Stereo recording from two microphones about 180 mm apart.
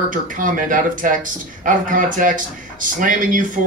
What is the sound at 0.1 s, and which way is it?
Speech, 45° right (ahead or behind).